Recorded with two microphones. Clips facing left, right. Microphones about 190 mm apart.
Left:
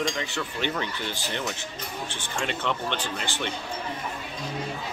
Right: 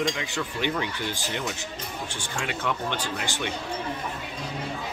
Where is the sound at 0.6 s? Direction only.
15° right (ahead or behind).